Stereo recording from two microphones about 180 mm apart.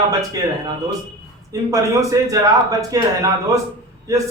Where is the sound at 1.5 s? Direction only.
20° right (ahead or behind).